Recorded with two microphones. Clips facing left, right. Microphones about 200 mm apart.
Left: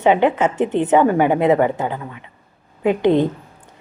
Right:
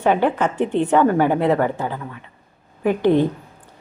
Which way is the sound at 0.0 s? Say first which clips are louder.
Left 3 dB; 20° left (ahead or behind).